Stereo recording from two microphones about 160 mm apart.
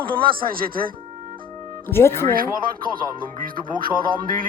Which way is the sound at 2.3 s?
65° right (ahead or behind).